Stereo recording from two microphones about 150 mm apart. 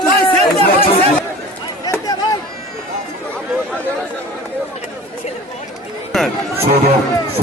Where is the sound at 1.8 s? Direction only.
25° left (ahead or behind).